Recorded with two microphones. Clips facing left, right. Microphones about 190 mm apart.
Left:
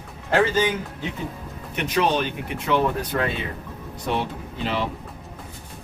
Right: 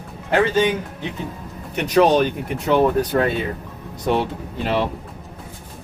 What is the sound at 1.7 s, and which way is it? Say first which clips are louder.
Speech: right 7 dB; 40° right (ahead or behind).